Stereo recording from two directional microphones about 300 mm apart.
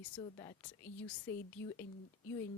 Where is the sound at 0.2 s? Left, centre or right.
Centre.